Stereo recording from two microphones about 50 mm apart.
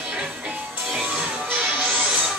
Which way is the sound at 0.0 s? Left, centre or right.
Centre.